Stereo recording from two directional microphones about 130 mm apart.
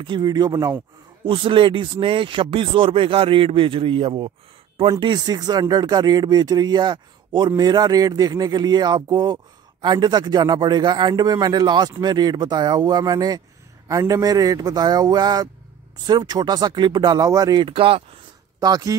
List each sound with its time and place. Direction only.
0.0 s speech: 35° right (ahead or behind)
5.0 s a man's voice: 30° right (ahead or behind)
17.6 s speech: 45° right (ahead or behind)
18.6 s speech: 30° right (ahead or behind)